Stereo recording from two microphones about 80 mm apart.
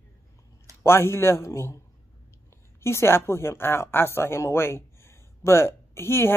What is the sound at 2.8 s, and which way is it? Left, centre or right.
Speech, left.